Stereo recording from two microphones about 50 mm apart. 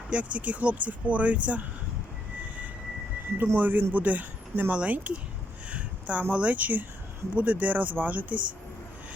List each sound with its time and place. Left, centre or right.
0.1 s speech: right
3.3 s speech: right
5.7 s a sound: right
6.3 s speech: right